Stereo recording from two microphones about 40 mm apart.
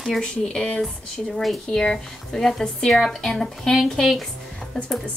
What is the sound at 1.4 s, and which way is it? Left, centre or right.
Speech, centre.